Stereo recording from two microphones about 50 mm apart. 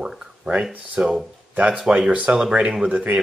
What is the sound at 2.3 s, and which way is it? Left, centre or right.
Speech, right.